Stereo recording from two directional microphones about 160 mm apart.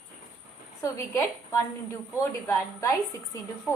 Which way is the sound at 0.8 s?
20° left (ahead or behind).